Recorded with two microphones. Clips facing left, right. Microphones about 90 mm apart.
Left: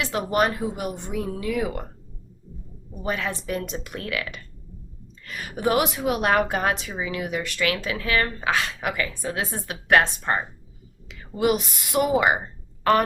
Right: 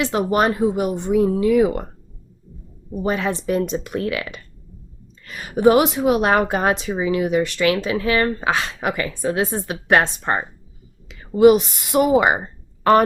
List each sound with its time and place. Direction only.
0.0 s a woman's voice: 25° right (ahead or behind)
3.0 s a woman's voice: 25° right (ahead or behind)